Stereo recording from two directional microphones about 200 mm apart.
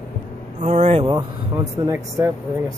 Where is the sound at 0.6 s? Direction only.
35° right (ahead or behind).